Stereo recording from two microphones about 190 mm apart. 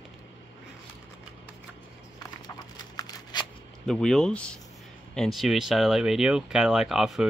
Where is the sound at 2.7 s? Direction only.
20° left (ahead or behind).